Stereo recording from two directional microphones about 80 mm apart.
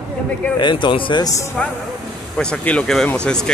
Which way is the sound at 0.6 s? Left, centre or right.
Left.